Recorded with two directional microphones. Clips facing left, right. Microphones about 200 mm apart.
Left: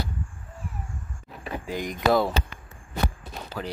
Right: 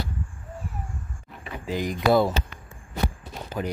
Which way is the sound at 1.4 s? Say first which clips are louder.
Right 1 dB; 45° left (ahead or behind).